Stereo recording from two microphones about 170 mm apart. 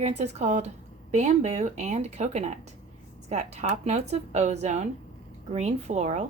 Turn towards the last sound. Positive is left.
turn(degrees=-45)  # may be behind; listen again after turning